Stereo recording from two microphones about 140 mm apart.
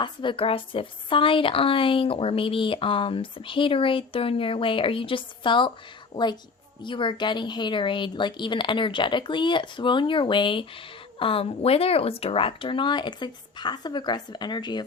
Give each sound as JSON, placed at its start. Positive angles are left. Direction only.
{"t": 0.0, "sound": "speech", "side_deg": 35}
{"t": 6.8, "sound": "speech", "side_deg": 35}